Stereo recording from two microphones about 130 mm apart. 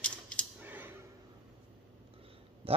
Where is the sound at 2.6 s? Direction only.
45° right (ahead or behind).